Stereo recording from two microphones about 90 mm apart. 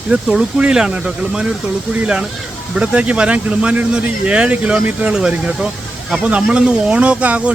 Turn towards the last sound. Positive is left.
turn(degrees=-15)  # may be behind; listen again after turning